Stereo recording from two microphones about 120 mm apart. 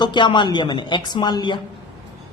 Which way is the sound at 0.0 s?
40° left (ahead or behind).